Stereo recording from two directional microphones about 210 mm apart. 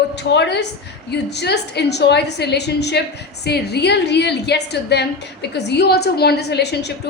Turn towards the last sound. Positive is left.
turn(degrees=50)  # may be behind; listen again after turning